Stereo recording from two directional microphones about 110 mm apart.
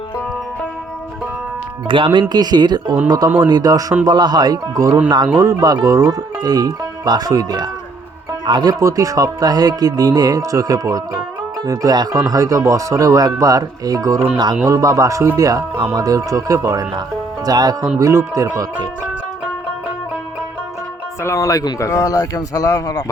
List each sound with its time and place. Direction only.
1.9 s speech: 50° right (ahead or behind)
8.8 s speech: 30° right (ahead or behind)
21.2 s speech: 30° left (ahead or behind)